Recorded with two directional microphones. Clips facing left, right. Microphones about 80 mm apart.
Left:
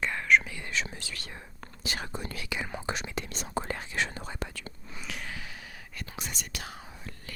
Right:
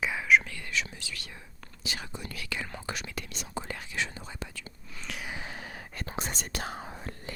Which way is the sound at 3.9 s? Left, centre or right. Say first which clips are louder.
Left 2 dB; left.